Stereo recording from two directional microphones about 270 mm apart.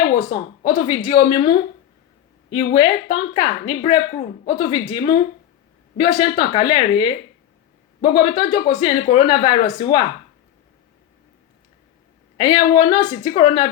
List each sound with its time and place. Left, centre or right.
0.6 s a woman's voice: centre
12.4 s a woman's voice: centre